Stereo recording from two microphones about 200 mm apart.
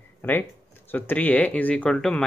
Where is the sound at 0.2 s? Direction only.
10° left (ahead or behind).